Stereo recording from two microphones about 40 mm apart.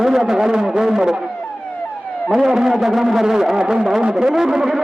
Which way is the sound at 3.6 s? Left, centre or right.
Right.